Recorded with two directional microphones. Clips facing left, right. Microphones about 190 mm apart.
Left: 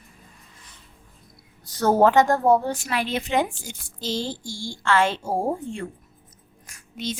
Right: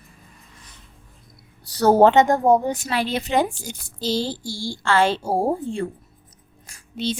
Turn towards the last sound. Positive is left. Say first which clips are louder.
# right 5 dB
turn(degrees=-30)  # may be behind; listen again after turning